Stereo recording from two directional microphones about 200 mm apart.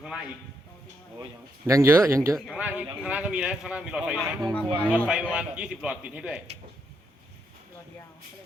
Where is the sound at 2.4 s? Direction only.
5° right (ahead or behind).